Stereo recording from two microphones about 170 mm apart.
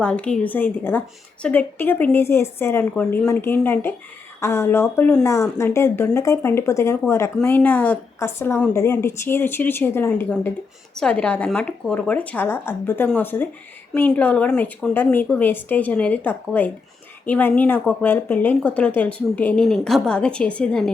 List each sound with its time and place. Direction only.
0.0 s a woman's voice: 5° left (ahead or behind)